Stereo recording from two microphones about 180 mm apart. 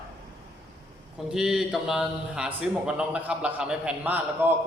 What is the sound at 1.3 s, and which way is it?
A man's voice, 5° right (ahead or behind).